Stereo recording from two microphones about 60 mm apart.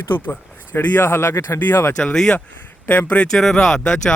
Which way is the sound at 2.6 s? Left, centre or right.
Left.